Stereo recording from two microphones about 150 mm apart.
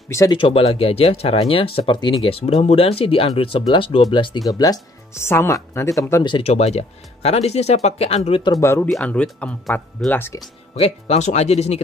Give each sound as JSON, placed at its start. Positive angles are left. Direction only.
{"t": 0.1, "sound": "speech", "side_deg": 20}
{"t": 0.4, "sound": "speech", "side_deg": 40}
{"t": 6.3, "sound": "speech", "side_deg": 45}
{"t": 8.5, "sound": "speech", "side_deg": 20}
{"t": 8.8, "sound": "speech", "side_deg": 5}
{"t": 10.7, "sound": "speech", "side_deg": 45}